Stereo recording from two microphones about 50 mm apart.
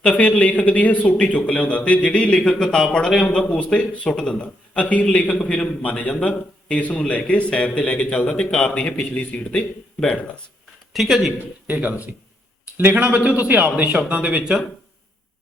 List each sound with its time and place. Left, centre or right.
0.2 s a man's voice: left
10.9 s a man's voice: centre
11.7 s a man's voice: right
12.7 s a man's voice: right